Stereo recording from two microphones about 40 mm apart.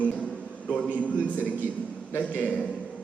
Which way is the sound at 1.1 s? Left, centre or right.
Right.